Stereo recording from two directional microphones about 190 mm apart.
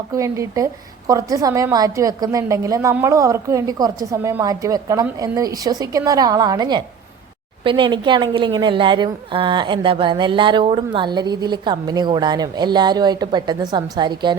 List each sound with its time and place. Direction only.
0.1 s a woman's voice: 15° right (ahead or behind)